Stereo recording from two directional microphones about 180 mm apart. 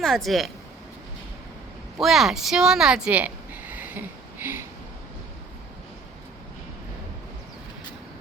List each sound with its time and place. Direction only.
0.0 s speech: centre (ahead or behind)
2.0 s speech: centre (ahead or behind)